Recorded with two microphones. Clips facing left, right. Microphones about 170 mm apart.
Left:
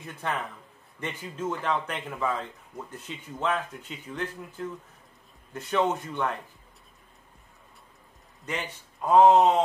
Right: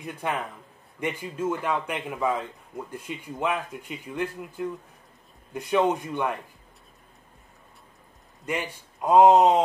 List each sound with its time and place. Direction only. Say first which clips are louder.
0.0 s speech: right 2 dB; 15° right (ahead or behind)
8.5 s speech: right 4 dB; 15° right (ahead or behind)